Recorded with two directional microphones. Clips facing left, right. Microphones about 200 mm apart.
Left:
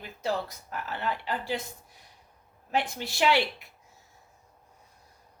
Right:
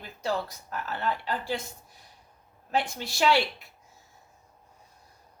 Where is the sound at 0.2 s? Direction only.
15° left (ahead or behind).